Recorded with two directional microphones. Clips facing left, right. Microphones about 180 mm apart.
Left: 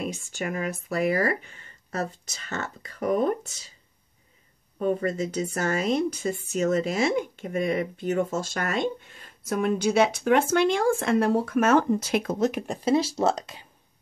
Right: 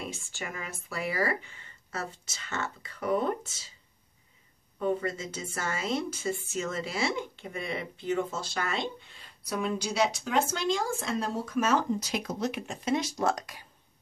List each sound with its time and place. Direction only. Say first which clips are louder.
0.1 s speech: left 8 dB; 45° left (ahead or behind)
4.7 s speech: left 4 dB; 45° left (ahead or behind); by 13.7 s 25° left (ahead or behind)